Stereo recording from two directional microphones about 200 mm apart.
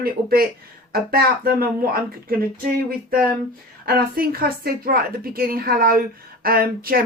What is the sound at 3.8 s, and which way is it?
A woman's voice, 50° right (ahead or behind).